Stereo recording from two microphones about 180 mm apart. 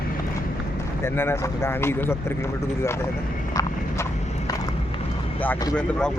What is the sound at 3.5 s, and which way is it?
Horse, 20° left (ahead or behind).